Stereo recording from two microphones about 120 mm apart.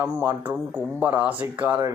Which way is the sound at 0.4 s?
15° right (ahead or behind).